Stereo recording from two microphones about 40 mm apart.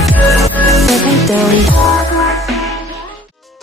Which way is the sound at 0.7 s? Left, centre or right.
Centre.